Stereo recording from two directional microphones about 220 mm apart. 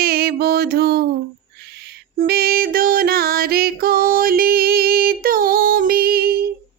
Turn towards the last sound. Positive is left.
turn(degrees=-45)  # may be behind; listen again after turning